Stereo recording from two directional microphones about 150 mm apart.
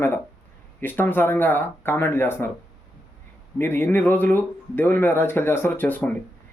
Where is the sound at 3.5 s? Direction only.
15° left (ahead or behind).